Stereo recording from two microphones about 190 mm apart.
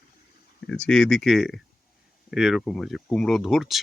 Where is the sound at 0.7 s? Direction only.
5° left (ahead or behind).